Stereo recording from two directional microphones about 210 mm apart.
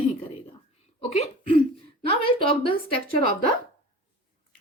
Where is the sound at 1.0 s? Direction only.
30° left (ahead or behind).